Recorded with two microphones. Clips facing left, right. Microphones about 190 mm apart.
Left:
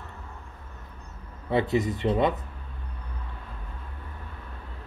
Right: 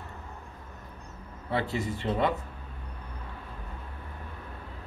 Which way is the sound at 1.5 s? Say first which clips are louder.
Left 6 dB; 20° left (ahead or behind).